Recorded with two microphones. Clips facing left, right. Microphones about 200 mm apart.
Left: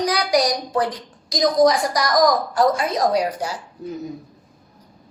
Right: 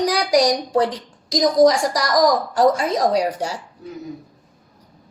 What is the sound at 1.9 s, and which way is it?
Speech, 35° right (ahead or behind).